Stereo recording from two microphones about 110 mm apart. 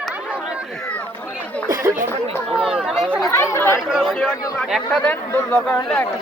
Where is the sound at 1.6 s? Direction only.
35° right (ahead or behind).